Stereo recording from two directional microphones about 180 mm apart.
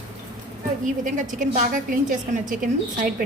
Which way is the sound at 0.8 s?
45° right (ahead or behind).